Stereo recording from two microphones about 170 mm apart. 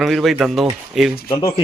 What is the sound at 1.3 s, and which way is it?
Speech, 25° left (ahead or behind).